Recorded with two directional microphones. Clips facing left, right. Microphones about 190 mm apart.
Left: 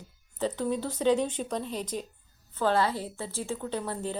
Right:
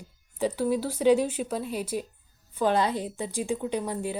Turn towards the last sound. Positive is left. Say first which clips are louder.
# right 3 dB
turn(degrees=-10)  # may be behind; listen again after turning